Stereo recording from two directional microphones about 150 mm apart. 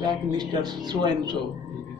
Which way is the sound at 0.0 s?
25° right (ahead or behind).